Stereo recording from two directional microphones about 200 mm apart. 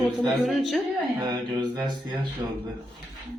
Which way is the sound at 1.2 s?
20° right (ahead or behind).